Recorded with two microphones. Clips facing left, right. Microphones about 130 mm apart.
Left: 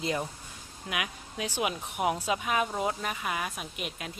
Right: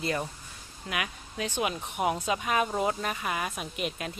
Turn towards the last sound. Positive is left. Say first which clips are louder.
# right 4 dB
turn(degrees=0)  # may be behind; listen again after turning